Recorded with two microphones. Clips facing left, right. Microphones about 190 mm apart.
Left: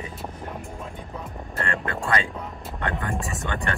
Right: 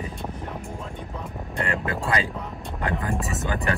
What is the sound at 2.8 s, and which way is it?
Speech, centre (ahead or behind).